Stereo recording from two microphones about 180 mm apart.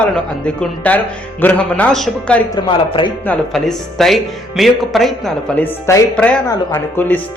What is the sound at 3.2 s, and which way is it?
Speech, 5° left (ahead or behind).